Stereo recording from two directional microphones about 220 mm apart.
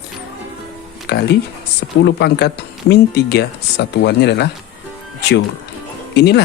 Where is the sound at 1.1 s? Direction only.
50° left (ahead or behind).